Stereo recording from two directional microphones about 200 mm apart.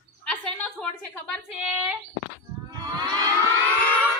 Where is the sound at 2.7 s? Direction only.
20° right (ahead or behind).